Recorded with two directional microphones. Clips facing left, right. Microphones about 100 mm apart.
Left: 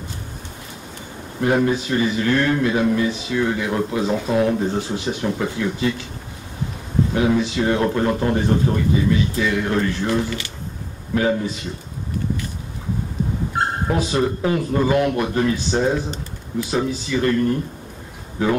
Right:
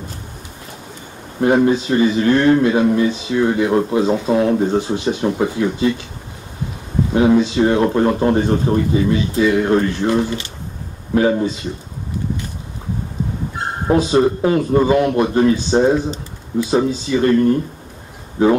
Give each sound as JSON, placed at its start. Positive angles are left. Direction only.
{"t": 1.4, "sound": "speech", "side_deg": -20}
{"t": 7.2, "sound": "speech", "side_deg": -25}
{"t": 13.8, "sound": "speech", "side_deg": -25}